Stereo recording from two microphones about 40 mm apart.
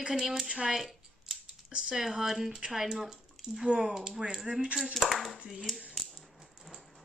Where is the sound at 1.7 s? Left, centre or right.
Right.